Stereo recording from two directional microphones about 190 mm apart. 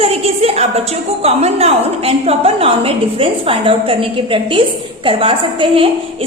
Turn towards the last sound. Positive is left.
turn(degrees=-30)  # may be behind; listen again after turning